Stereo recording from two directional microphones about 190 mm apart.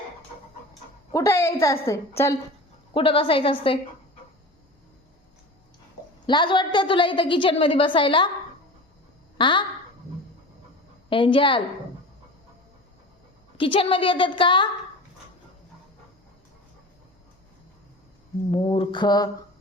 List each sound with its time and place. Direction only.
1.1 s a woman's voice: 15° left (ahead or behind)
2.9 s a woman's voice: 30° left (ahead or behind)
6.2 s a woman's voice: 25° left (ahead or behind)
9.4 s a woman's voice: 25° left (ahead or behind)
11.1 s a woman's voice: 25° left (ahead or behind)
13.6 s a woman's voice: 30° left (ahead or behind)
18.5 s mantra: 30° left (ahead or behind)